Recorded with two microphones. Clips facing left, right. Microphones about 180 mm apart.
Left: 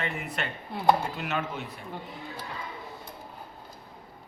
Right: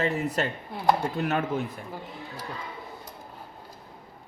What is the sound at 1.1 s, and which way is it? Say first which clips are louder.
Speech: right 5 dB; 50° right (ahead or behind).